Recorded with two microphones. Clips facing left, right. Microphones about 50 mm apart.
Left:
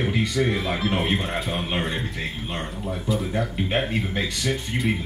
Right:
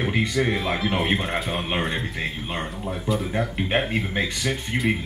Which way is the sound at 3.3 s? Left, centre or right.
Right.